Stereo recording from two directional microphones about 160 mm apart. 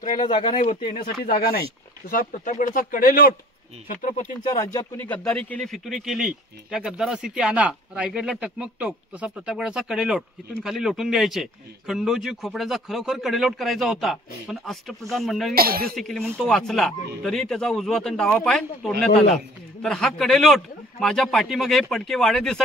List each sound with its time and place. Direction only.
0.6 s speech: 55° left (ahead or behind)
1.2 s speech: 65° left (ahead or behind)
2.0 s speech: 55° left (ahead or behind)
4.5 s speech: 20° left (ahead or behind); by 15.5 s centre (ahead or behind)
15.5 s speech: 70° right (ahead or behind)
15.9 s speech: centre (ahead or behind)